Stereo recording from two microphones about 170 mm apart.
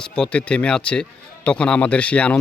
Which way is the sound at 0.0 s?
5° left (ahead or behind).